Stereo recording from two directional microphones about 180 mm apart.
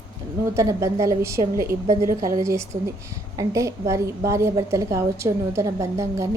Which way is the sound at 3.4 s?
15° right (ahead or behind).